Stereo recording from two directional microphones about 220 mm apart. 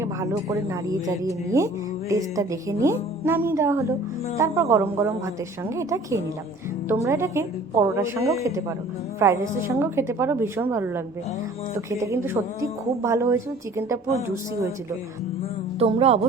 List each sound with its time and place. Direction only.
0.0 s speech: 15° right (ahead or behind)
15.8 s speech: 25° right (ahead or behind)